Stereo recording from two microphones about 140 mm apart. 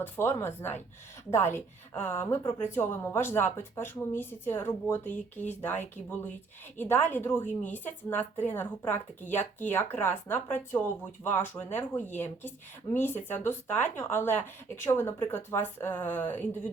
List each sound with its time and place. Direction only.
0.0 s a woman's voice: 15° left (ahead or behind)